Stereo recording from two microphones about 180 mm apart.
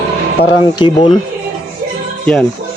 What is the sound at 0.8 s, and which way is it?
Speech, 25° left (ahead or behind).